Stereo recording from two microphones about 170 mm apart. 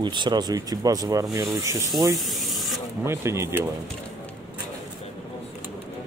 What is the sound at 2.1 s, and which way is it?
Spray, centre (ahead or behind).